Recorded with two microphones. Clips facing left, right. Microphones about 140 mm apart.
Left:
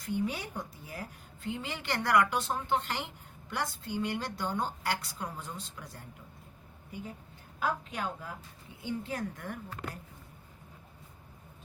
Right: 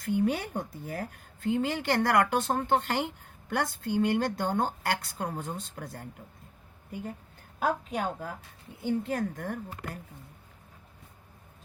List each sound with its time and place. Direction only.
0.0 s speech: 50° right (ahead or behind)
7.6 s speech: 45° right (ahead or behind)